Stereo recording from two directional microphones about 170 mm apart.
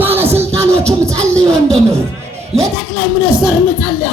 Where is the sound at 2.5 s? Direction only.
35° right (ahead or behind).